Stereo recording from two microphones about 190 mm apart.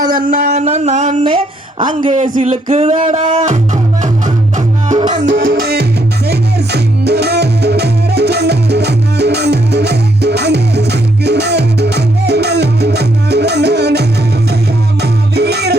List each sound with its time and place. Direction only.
0.1 s a sound: 45° right (ahead or behind)
2.1 s music: 40° right (ahead or behind)
5.2 s music: 55° right (ahead or behind)